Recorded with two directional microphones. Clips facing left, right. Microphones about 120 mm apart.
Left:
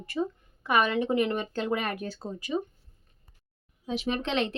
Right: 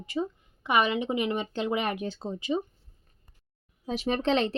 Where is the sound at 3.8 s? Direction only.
40° right (ahead or behind).